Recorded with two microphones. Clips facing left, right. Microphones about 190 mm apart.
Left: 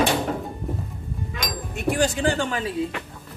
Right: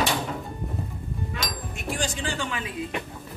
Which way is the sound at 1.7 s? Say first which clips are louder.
Left 9 dB; 65° left (ahead or behind).